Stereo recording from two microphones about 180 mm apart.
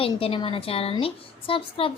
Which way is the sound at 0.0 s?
30° left (ahead or behind).